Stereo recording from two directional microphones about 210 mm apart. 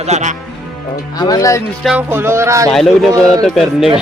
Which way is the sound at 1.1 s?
20° left (ahead or behind).